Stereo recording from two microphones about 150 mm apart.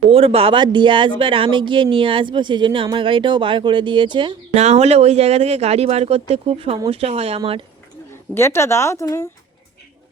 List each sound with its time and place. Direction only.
0.1 s speech: 40° right (ahead or behind)
4.5 s speech: 45° right (ahead or behind)
8.4 s speech: 15° left (ahead or behind)